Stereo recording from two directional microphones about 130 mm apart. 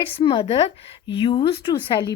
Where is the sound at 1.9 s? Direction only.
35° left (ahead or behind).